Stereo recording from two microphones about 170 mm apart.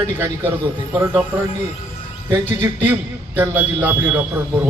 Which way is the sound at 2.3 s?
25° right (ahead or behind).